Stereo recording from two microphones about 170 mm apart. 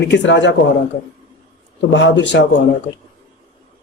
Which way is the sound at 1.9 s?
90° left.